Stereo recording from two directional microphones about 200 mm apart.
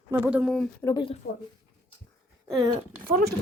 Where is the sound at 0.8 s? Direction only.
25° left (ahead or behind).